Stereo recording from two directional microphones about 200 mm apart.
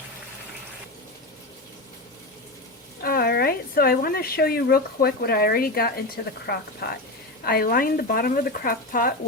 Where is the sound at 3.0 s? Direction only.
50° left (ahead or behind).